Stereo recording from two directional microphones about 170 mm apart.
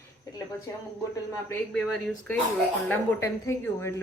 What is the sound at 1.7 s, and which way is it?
Speech, 5° left (ahead or behind).